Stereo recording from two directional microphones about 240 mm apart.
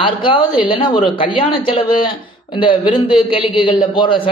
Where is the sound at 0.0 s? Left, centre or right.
Left.